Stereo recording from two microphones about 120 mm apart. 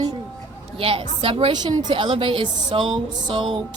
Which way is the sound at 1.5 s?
40° right (ahead or behind).